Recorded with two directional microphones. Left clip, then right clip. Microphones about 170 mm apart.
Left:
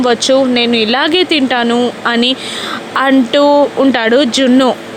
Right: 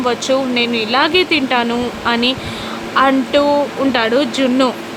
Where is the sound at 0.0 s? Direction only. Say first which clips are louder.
Left 6 dB; 30° left (ahead or behind).